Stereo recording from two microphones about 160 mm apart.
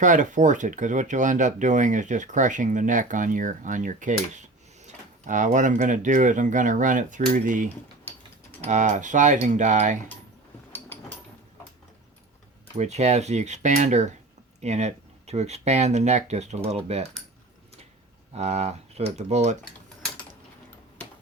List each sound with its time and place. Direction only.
0.0 s speech: 50° right (ahead or behind)
12.7 s speech: 45° right (ahead or behind)
18.3 s speech: 40° right (ahead or behind)